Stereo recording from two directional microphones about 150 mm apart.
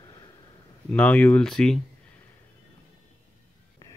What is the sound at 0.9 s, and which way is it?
Speech, 10° left (ahead or behind).